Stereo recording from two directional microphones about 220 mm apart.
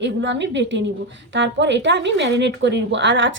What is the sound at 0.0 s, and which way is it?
Speech, 55° right (ahead or behind).